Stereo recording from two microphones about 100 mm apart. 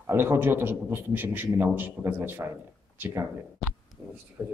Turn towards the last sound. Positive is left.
turn(degrees=-15)  # may be behind; listen again after turning